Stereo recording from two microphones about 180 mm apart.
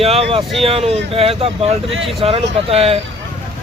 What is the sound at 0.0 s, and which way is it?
Speech, 35° right (ahead or behind).